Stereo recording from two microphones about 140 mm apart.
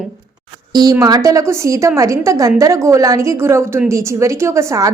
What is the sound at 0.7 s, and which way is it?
A woman's voice, 25° right (ahead or behind).